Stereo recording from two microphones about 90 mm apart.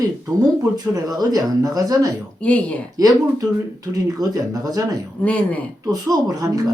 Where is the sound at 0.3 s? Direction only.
40° right (ahead or behind).